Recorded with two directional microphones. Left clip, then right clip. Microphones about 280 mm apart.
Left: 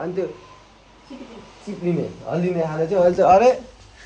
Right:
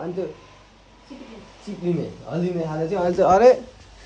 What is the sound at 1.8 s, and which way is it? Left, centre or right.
Speech, left.